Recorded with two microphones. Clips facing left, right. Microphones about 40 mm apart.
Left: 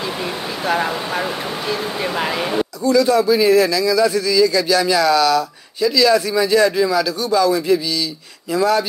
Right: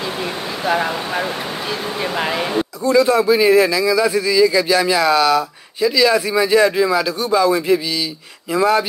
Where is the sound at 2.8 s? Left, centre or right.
Right.